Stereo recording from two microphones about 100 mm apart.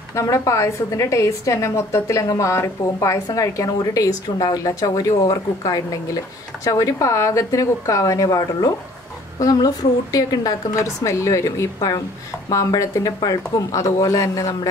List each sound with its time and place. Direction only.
0.1 s a woman's voice: 30° left (ahead or behind)